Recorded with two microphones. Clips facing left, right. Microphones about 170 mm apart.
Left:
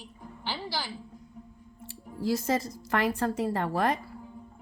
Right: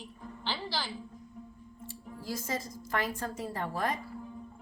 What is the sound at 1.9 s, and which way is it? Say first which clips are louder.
Speech: left 9 dB; 70° left (ahead or behind).